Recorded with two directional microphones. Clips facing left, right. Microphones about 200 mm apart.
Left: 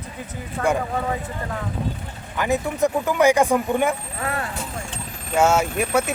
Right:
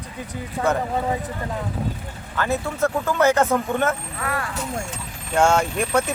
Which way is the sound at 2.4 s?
15° left (ahead or behind).